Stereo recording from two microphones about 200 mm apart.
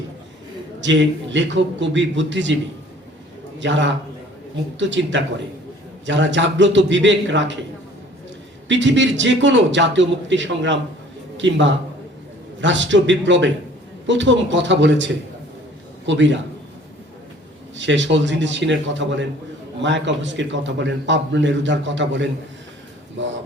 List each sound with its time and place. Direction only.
0.8 s a man's voice: 65° right (ahead or behind)
3.6 s a man's voice: 65° right (ahead or behind)
8.6 s a man's voice: 65° right (ahead or behind)
17.7 s a man's voice: 65° right (ahead or behind)
23.2 s a sound: 65° right (ahead or behind)